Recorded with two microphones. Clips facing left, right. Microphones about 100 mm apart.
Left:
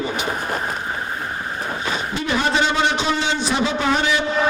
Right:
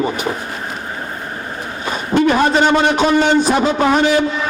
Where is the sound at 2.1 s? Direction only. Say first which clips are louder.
Right 10 dB; 50° right (ahead or behind).